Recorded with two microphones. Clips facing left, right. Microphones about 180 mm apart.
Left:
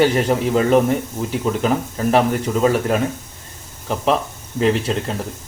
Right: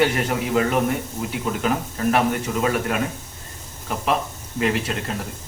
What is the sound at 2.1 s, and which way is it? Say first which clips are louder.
Speech: left 4 dB; 30° left (ahead or behind).